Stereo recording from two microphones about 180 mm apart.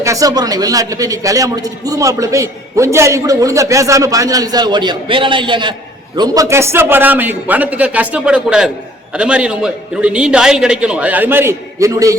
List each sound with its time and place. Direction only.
0.0 s a man's voice: 20° right (ahead or behind)